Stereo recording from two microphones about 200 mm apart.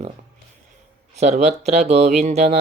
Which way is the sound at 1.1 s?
35° right (ahead or behind).